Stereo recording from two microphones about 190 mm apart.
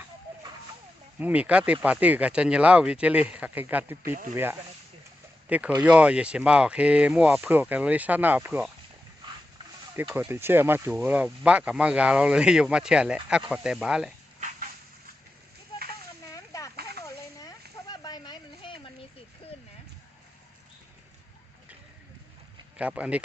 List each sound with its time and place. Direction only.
1.2 s speech: 5° right (ahead or behind)
5.5 s speech: 5° right (ahead or behind)
9.9 s speech: 10° right (ahead or behind)
16.3 s a sound: 15° left (ahead or behind)
22.8 s speech: 5° right (ahead or behind)